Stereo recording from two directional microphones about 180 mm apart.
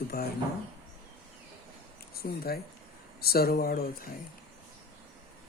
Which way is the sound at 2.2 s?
55° left (ahead or behind).